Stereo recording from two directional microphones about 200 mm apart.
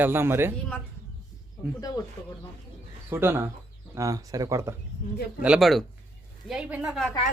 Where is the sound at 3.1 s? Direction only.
10° right (ahead or behind).